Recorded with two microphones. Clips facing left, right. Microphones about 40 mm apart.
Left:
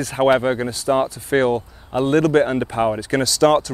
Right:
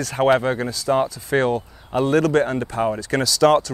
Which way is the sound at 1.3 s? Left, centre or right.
Centre.